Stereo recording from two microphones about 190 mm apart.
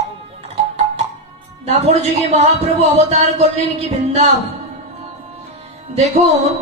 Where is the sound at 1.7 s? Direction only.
35° right (ahead or behind).